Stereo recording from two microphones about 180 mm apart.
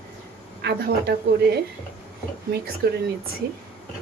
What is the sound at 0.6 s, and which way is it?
Speech, 60° right (ahead or behind).